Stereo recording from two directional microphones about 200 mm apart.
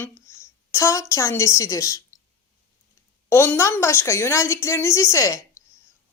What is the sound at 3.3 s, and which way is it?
A woman's voice, 10° left (ahead or behind).